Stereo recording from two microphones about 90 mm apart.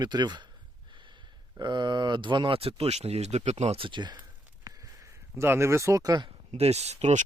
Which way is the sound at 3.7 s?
65° right (ahead or behind).